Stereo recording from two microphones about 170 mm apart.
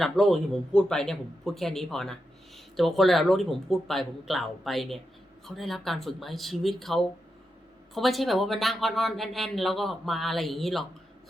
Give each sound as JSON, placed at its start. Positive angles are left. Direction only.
{"t": 0.0, "sound": "speech", "side_deg": 0}